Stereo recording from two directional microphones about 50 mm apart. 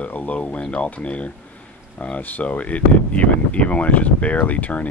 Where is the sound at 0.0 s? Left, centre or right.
Left.